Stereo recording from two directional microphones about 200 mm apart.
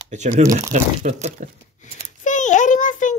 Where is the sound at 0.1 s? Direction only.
35° right (ahead or behind).